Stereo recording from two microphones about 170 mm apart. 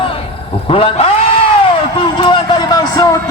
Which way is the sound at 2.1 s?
30° left (ahead or behind).